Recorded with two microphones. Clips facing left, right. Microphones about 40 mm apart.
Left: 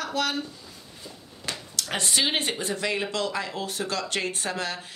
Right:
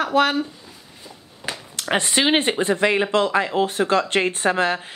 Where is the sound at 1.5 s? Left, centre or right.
Right.